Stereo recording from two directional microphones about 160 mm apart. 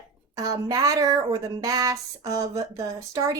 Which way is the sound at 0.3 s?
20° right (ahead or behind).